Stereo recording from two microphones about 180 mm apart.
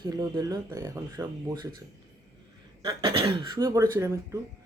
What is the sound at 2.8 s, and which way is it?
Speech, 20° right (ahead or behind).